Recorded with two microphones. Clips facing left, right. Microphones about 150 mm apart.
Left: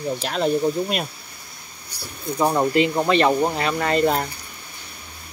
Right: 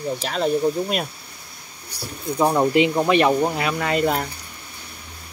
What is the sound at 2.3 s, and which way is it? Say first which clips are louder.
Speech: right 1 dB; 5° right (ahead or behind).